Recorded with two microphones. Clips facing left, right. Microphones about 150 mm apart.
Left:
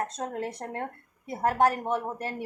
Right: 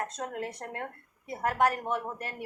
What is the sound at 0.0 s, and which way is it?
A woman's voice, 30° left (ahead or behind).